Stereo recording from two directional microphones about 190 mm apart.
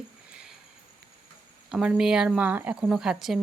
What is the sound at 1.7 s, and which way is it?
Speech, 5° right (ahead or behind).